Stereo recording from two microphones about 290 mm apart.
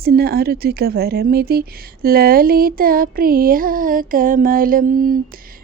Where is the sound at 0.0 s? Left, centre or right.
Right.